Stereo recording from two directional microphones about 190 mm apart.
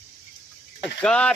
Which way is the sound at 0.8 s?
5° left (ahead or behind).